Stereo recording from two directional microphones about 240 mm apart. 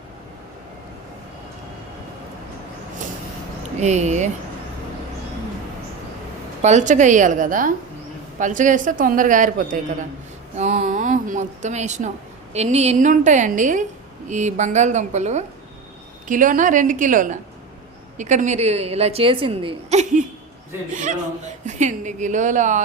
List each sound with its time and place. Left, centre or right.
3.8 s a woman's voice: right
6.6 s a woman's voice: right
21.7 s speech: right